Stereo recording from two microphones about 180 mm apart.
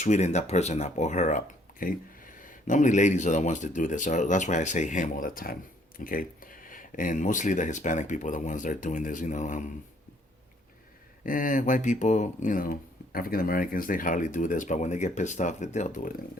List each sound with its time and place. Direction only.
0.0 s speech: 40° left (ahead or behind)
11.3 s speech: 45° left (ahead or behind)